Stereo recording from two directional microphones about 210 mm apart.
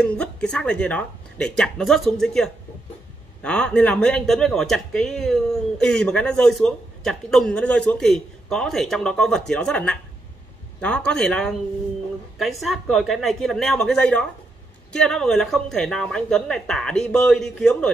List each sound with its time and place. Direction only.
0.2 s speech: 5° left (ahead or behind)